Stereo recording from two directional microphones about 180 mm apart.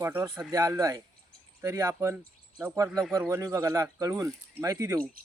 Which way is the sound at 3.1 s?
15° right (ahead or behind).